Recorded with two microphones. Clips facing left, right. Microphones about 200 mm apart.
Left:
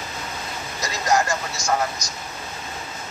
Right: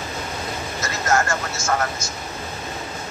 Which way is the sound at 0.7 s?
15° left (ahead or behind).